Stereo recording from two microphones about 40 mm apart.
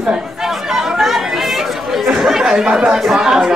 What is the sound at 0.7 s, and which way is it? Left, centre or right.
Chatter, centre.